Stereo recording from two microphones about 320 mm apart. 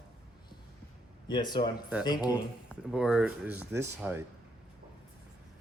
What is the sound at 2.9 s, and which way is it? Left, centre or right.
Speech, centre.